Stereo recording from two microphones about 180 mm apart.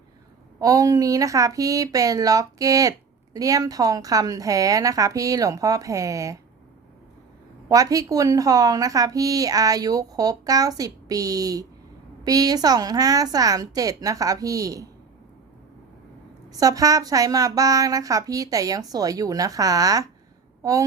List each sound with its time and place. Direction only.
0.6 s a woman's voice: 20° right (ahead or behind)
7.7 s a woman's voice: 20° right (ahead or behind)
16.5 s a woman's voice: 20° right (ahead or behind)